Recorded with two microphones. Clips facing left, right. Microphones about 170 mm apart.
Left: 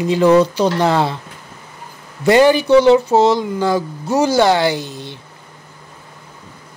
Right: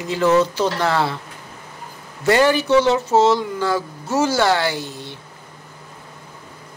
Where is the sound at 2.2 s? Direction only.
15° left (ahead or behind).